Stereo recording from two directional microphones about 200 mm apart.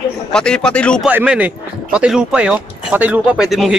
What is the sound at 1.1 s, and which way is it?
Speech, 10° right (ahead or behind).